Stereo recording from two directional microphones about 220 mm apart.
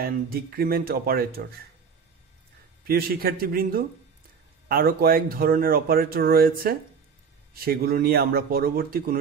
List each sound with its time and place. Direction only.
0.0 s speech: 45° right (ahead or behind)
2.9 s speech: 45° right (ahead or behind)